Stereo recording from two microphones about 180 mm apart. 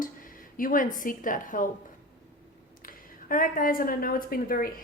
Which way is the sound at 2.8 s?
50° left (ahead or behind).